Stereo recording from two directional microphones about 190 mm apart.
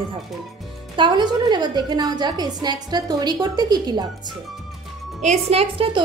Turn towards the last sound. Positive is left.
turn(degrees=-30)  # may be behind; listen again after turning